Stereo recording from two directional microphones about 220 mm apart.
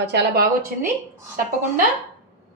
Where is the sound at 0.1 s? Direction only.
45° right (ahead or behind).